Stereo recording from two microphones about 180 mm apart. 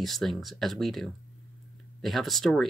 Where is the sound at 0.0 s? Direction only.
Centre (ahead or behind).